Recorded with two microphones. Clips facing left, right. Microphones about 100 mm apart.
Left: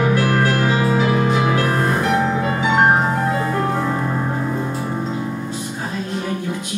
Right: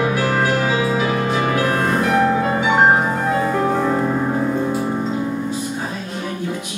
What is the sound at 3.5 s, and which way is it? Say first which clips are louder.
Music: right 2 dB; 5° right (ahead or behind).